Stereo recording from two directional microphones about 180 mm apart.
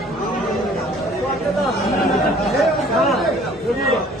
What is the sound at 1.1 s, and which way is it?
Chatter, centre (ahead or behind).